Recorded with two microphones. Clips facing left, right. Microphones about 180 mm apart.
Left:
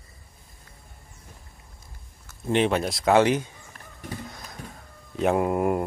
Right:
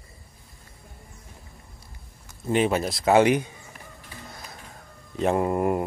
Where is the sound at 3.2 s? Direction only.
15° right (ahead or behind).